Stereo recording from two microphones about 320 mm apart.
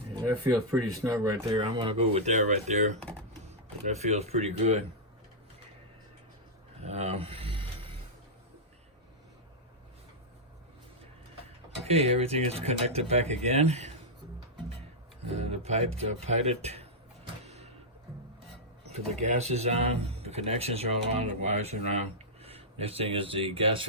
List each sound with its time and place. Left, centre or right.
1.0 s speech: centre
6.8 s a sound: centre
11.9 s speech: centre
15.4 s speech: centre
17.4 s a sound: centre
18.9 s speech: right